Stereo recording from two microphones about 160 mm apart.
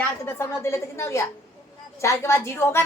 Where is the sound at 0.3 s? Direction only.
15° left (ahead or behind).